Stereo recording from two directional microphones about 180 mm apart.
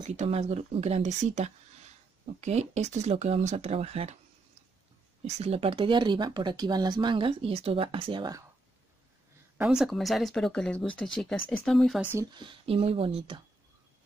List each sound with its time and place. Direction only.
0.0 s speech: 40° right (ahead or behind)
5.2 s speech: 35° right (ahead or behind)
9.6 s speech: 5° right (ahead or behind)
12.4 s speech: 30° right (ahead or behind)